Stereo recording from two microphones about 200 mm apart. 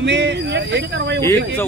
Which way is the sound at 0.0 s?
60° right (ahead or behind).